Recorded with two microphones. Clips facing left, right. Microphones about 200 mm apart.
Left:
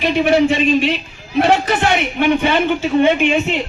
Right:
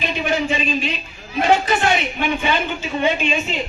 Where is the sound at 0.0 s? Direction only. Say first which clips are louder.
Left 8 dB; 70° left (ahead or behind).